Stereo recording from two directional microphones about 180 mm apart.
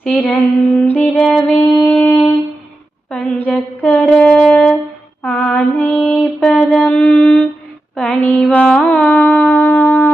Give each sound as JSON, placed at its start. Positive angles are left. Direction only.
{"t": 0.0, "sound": "female singing", "side_deg": 5}
{"t": 1.6, "sound": "shofar", "side_deg": 15}
{"t": 3.1, "sound": "female singing", "side_deg": 5}
{"t": 9.3, "sound": "shofar", "side_deg": 10}